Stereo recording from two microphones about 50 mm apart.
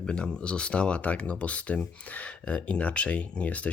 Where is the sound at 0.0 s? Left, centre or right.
Centre.